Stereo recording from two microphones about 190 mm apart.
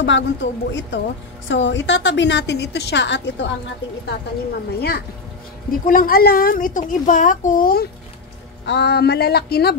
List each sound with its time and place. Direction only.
0.0 s a woman's voice: 70° left (ahead or behind)
4.7 s a woman's voice: 55° left (ahead or behind)
8.6 s speech: 65° left (ahead or behind)